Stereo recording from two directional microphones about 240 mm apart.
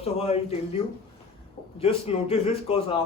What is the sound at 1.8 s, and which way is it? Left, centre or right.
A man's voice, left.